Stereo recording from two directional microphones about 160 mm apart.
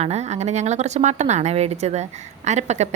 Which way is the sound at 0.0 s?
45° right (ahead or behind).